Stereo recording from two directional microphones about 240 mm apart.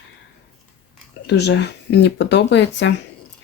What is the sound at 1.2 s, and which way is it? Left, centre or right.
Speech, left.